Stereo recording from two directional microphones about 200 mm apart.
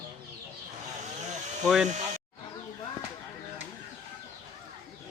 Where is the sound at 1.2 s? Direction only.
35° right (ahead or behind).